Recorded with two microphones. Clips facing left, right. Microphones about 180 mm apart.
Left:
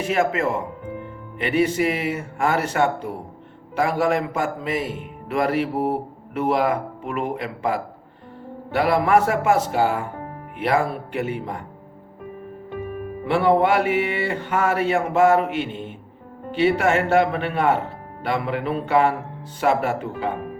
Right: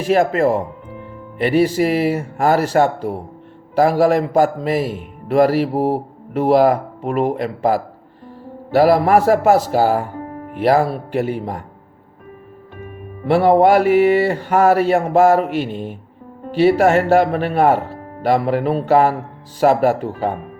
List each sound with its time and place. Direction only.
0.1 s a man's voice: 35° right (ahead or behind)
13.2 s a man's voice: 40° right (ahead or behind)